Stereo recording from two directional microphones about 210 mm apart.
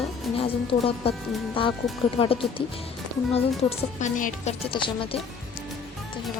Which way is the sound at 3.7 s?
35° left (ahead or behind).